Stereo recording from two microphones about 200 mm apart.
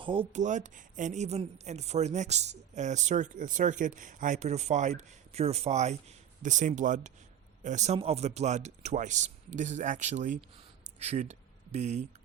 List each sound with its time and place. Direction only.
0.0 s speech: 25° right (ahead or behind)